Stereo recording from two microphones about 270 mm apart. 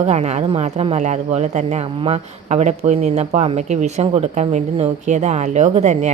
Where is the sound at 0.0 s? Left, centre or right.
Right.